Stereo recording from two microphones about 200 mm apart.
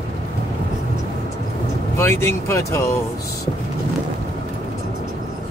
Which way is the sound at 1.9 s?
10° left (ahead or behind).